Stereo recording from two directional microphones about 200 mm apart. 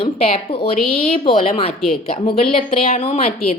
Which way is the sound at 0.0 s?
30° left (ahead or behind).